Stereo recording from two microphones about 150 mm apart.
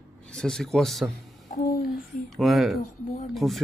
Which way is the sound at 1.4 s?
75° left (ahead or behind).